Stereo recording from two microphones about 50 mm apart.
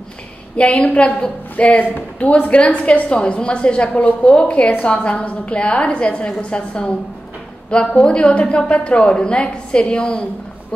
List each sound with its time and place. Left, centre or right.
0.8 s a woman's voice: left
4.8 s a woman's voice: left